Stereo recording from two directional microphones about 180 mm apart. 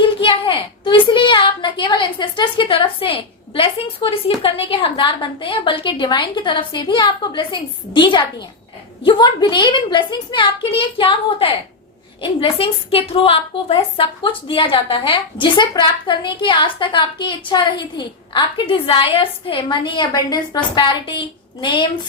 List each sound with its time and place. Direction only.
0.0 s a woman's voice: 25° left (ahead or behind)